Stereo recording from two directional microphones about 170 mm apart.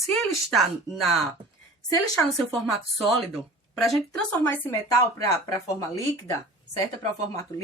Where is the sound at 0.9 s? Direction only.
15° left (ahead or behind).